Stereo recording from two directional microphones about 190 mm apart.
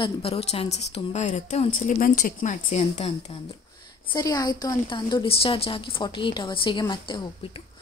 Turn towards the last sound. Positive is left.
turn(degrees=25)  # may be behind; listen again after turning